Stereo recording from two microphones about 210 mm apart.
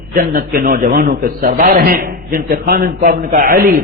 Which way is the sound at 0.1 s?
40° right (ahead or behind).